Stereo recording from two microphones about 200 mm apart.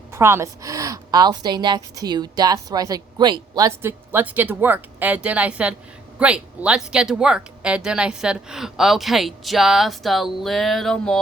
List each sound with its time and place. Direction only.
0.1 s a woman's voice: 15° right (ahead or behind); by 11.2 s 5° left (ahead or behind)